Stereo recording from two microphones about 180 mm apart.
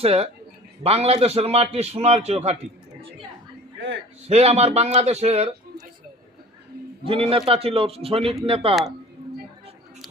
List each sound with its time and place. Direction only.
0.0 s a man's voice: 35° right (ahead or behind)
4.3 s a man's voice: 35° right (ahead or behind)
7.0 s a man's voice: 30° right (ahead or behind)